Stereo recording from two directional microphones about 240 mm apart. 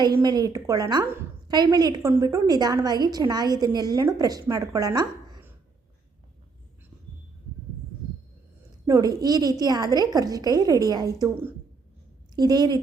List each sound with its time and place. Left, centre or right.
0.2 s a woman's voice: centre
8.9 s a woman's voice: centre